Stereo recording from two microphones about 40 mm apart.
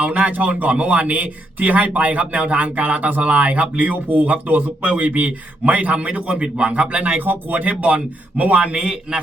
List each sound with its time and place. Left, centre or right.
0.1 s speech: right
8.7 s a man's voice: right